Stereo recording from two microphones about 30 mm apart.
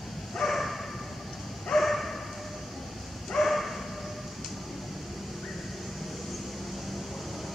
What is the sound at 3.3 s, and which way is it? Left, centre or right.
Bow-wow, centre.